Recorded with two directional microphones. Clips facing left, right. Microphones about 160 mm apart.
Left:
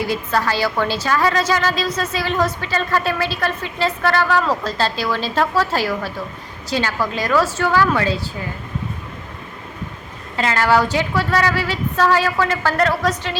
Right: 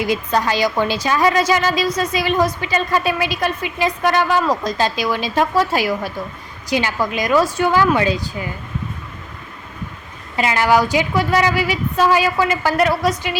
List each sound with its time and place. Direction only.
0.0 s a woman's voice: 15° right (ahead or behind)
10.3 s a woman's voice: 15° right (ahead or behind)